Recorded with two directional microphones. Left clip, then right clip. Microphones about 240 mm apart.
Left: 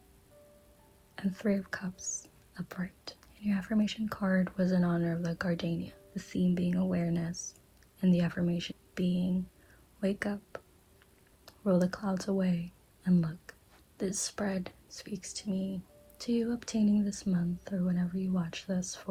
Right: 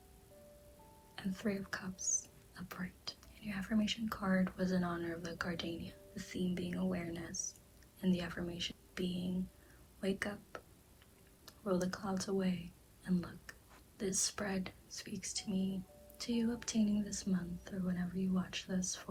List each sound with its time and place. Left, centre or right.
1.1 s speech: left
9.0 s speech: left
10.0 s speech: left
13.5 s whispering: left
14.0 s speech: left